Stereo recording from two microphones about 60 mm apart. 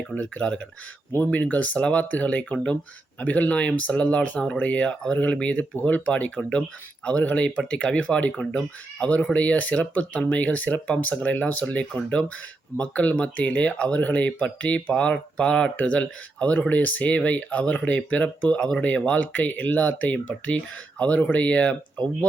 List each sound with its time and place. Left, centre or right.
0.0 s speech: centre
1.1 s speech: left